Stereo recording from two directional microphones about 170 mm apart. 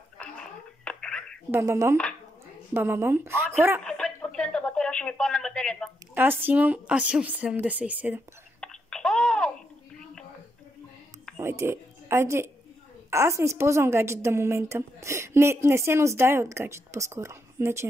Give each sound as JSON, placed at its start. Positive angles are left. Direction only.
{"t": 0.2, "sound": "whispering", "side_deg": 5}
{"t": 1.5, "sound": "a woman's voice", "side_deg": -15}
{"t": 3.8, "sound": "a sound", "side_deg": 5}
{"t": 4.4, "sound": "speech", "side_deg": 5}
{"t": 6.1, "sound": "a woman's voice", "side_deg": -10}
{"t": 8.5, "sound": "babbling", "side_deg": 5}
{"t": 11.3, "sound": "a woman's voice", "side_deg": -15}